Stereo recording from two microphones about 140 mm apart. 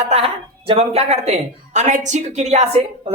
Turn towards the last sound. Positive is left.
turn(degrees=-50)  # may be behind; listen again after turning